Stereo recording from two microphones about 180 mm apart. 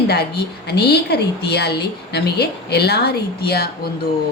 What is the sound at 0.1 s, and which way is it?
A woman's voice, 65° left (ahead or behind).